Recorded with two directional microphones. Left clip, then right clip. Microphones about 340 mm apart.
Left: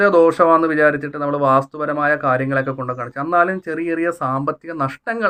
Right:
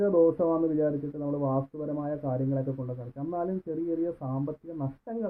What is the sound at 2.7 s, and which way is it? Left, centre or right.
Speech, left.